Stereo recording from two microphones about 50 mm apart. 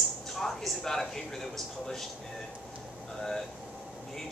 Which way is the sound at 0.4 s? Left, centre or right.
Centre.